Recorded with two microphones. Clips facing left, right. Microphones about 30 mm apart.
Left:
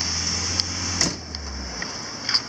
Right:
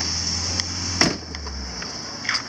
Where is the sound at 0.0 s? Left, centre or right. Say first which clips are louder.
Even; centre.